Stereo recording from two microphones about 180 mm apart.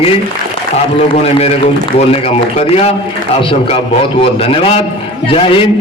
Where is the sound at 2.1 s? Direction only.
35° left (ahead or behind).